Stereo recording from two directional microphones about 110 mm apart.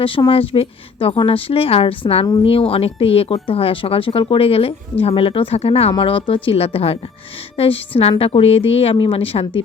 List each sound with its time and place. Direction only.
0.3 s speech: 60° left (ahead or behind)
6.0 s speech: 55° left (ahead or behind)